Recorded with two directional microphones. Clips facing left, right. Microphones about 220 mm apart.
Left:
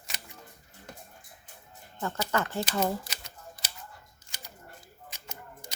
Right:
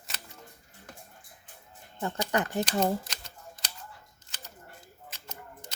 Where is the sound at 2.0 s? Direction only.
15° right (ahead or behind).